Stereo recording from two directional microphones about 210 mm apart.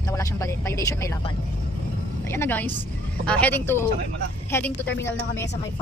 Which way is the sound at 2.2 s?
10° left (ahead or behind).